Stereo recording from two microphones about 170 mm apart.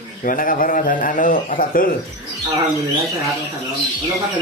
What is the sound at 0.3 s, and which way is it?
A man's voice, 55° left (ahead or behind).